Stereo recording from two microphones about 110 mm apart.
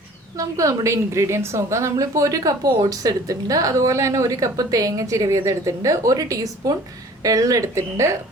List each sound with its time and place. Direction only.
0.3 s a woman's voice: 30° right (ahead or behind)